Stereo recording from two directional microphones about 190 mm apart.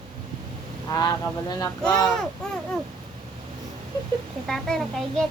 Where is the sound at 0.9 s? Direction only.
20° left (ahead or behind).